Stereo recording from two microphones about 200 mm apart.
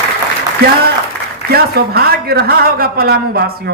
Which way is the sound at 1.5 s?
50° right (ahead or behind).